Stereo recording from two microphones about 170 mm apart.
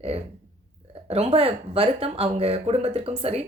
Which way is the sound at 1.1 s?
35° right (ahead or behind).